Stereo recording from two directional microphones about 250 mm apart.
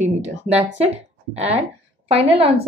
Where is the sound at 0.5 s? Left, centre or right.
Right.